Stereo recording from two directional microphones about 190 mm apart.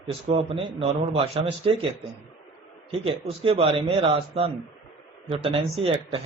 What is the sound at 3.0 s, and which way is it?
A man's voice, 30° right (ahead or behind).